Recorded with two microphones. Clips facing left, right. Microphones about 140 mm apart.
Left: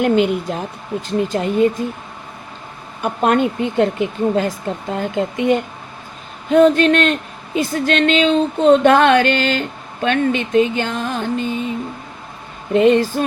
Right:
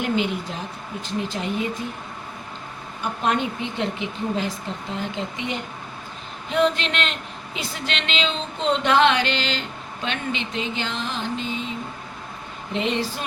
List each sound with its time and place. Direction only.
0.0 s speech: 50° left (ahead or behind)
3.0 s speech: 55° left (ahead or behind)
12.7 s speech: 50° left (ahead or behind)